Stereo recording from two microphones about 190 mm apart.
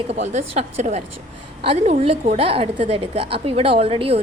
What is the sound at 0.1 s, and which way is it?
A woman's voice, 35° right (ahead or behind).